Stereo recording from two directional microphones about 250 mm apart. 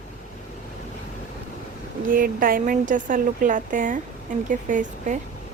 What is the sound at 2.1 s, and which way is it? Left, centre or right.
Speech, right.